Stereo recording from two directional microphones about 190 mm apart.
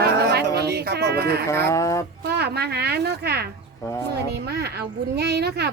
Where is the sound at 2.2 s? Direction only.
55° right (ahead or behind).